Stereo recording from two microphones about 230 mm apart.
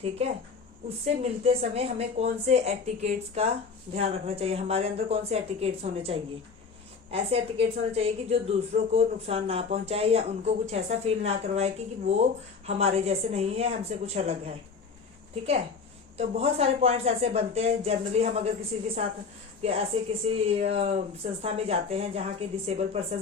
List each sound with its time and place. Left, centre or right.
1.0 s a woman's voice: right
16.1 s a woman's voice: right
19.6 s a woman's voice: right